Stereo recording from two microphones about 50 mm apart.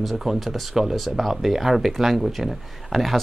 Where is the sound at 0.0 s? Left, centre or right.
Centre.